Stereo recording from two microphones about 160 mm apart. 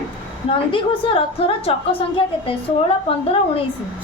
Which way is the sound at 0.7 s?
35° left (ahead or behind).